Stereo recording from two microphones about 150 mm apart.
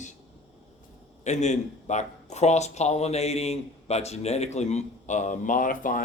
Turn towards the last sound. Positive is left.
turn(degrees=65)  # may be behind; listen again after turning